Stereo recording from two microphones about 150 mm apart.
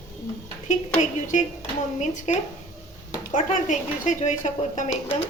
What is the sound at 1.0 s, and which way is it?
Speech, 55° left (ahead or behind).